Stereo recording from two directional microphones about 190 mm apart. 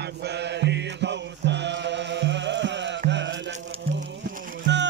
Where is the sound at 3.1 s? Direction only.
70° right (ahead or behind).